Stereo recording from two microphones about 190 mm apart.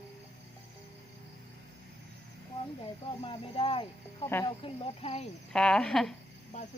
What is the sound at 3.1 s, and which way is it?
Speech, 30° left (ahead or behind).